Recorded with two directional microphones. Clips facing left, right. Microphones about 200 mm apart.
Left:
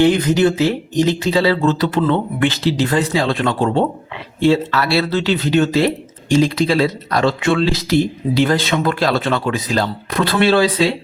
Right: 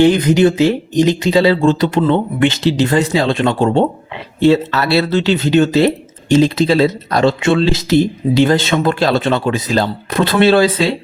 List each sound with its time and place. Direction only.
0.0 s speech: 20° right (ahead or behind)